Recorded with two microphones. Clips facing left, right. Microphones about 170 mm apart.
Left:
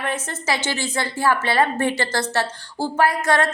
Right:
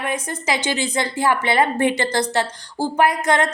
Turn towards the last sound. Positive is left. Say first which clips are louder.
# right 1 dB
turn(degrees=-20)  # may be behind; listen again after turning